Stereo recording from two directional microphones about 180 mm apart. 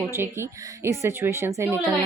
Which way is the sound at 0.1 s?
15° right (ahead or behind).